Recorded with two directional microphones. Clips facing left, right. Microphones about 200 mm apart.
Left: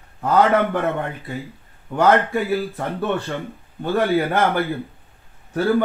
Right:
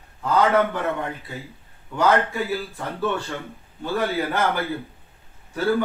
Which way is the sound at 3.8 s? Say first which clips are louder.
Left 5 dB; 50° left (ahead or behind).